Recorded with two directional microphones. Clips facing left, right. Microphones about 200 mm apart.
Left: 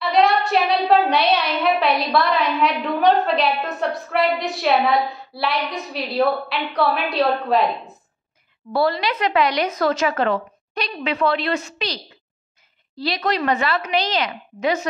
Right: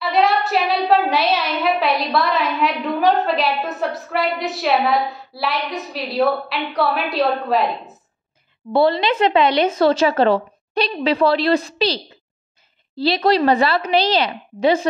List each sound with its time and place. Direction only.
0.0 s a child's voice: centre (ahead or behind)
8.7 s a woman's voice: 25° right (ahead or behind)